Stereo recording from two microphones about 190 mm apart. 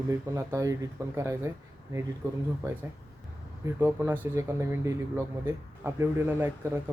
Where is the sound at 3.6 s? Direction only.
10° right (ahead or behind).